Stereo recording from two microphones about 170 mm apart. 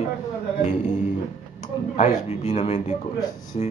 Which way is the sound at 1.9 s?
40° left (ahead or behind).